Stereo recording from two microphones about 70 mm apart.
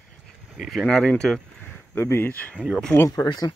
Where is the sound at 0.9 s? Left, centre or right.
Centre.